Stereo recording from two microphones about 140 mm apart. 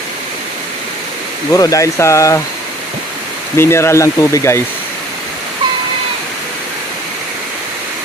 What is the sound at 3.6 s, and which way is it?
Speech, 20° left (ahead or behind).